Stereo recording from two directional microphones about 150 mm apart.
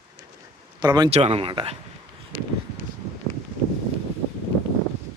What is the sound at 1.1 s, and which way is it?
Speech, 45° right (ahead or behind).